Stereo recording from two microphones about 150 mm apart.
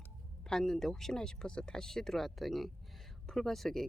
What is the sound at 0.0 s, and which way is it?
Speech, 5° left (ahead or behind).